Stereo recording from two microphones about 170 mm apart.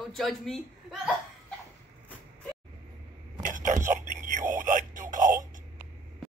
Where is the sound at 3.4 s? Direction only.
50° right (ahead or behind).